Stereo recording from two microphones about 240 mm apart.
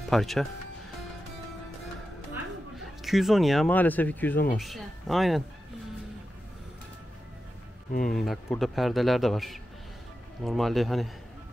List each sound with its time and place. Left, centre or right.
0.1 s speech: centre
3.0 s speech: centre
8.0 s speech: centre